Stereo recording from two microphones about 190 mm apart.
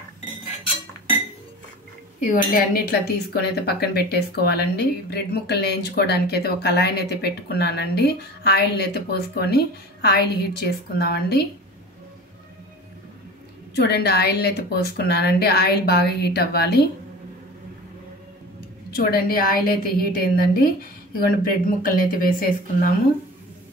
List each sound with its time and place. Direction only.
2.1 s speech: 40° left (ahead or behind)
13.7 s speech: 55° left (ahead or behind)
18.9 s a woman's voice: 55° left (ahead or behind)